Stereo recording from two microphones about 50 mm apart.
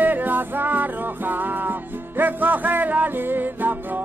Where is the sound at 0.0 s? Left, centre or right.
Right.